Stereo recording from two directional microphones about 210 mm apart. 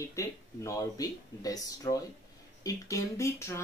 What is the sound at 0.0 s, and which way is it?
Speech, 15° left (ahead or behind).